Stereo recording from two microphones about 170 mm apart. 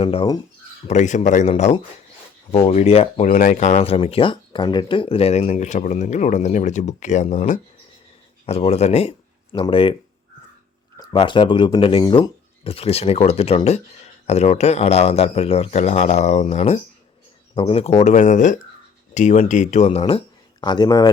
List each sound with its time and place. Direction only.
0.0 s speech: 30° left (ahead or behind)
0.9 s speech: 45° left (ahead or behind)
10.9 s speech: 25° left (ahead or behind)
12.6 s speech: 35° left (ahead or behind)